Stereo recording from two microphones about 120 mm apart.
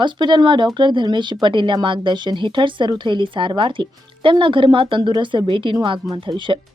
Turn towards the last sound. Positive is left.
turn(degrees=-40)  # may be behind; listen again after turning